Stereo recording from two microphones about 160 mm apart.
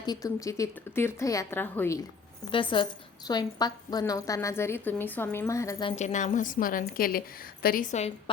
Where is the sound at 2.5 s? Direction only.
30° left (ahead or behind).